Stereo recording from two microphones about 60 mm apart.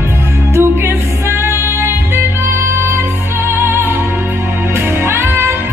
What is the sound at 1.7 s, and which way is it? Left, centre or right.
Music, right.